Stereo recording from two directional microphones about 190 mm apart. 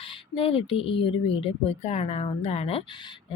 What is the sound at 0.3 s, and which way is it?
Speech, 30° left (ahead or behind).